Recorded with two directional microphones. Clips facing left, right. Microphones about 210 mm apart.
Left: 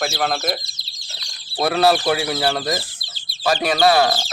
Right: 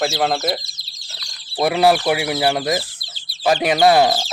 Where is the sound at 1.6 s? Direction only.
15° right (ahead or behind).